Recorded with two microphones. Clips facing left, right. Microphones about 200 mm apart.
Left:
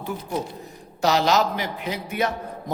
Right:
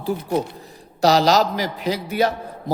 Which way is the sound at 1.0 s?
35° right (ahead or behind).